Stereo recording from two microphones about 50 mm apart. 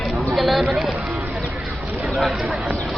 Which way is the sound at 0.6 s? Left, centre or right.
Centre.